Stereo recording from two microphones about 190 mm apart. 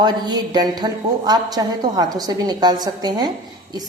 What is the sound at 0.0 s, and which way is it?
A woman's voice, 20° right (ahead or behind).